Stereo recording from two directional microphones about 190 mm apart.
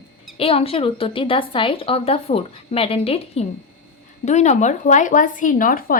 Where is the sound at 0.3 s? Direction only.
30° left (ahead or behind).